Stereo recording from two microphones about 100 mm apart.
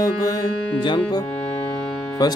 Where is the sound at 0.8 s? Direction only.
55° left (ahead or behind).